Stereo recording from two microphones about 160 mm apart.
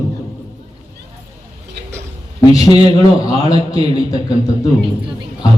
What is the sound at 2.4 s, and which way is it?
A man's voice, 20° left (ahead or behind).